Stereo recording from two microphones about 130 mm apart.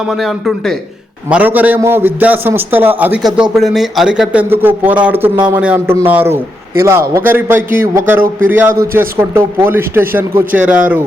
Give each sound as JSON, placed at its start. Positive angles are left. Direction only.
{"t": 0.1, "sound": "speech", "side_deg": 0}
{"t": 1.3, "sound": "speech", "side_deg": -15}